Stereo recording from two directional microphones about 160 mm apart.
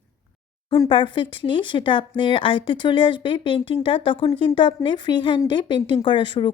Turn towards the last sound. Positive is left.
turn(degrees=30)  # may be behind; listen again after turning